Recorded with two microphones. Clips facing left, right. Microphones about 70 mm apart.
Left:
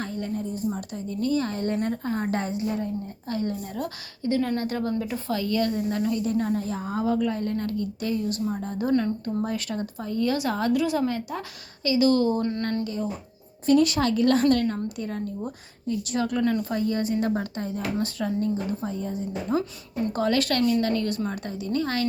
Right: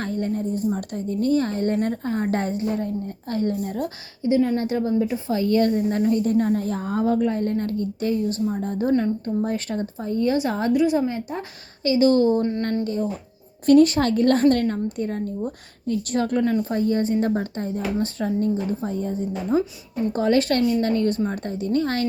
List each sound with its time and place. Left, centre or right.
0.0 s a woman's voice: right
3.8 s a woman's voice: centre
12.8 s a woman's voice: right
19.5 s a woman's voice: right